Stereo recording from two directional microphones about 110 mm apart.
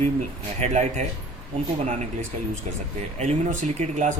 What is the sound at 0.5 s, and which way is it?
Speech, 90° right.